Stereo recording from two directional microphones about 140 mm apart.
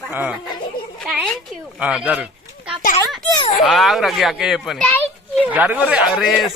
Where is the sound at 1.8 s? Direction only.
5° right (ahead or behind).